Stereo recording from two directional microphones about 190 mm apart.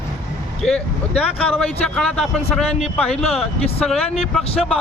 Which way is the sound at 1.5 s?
5° left (ahead or behind).